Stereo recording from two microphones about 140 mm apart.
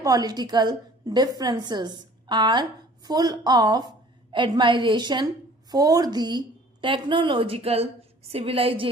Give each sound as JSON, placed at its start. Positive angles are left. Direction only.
{"t": 0.0, "sound": "a woman's voice", "side_deg": -25}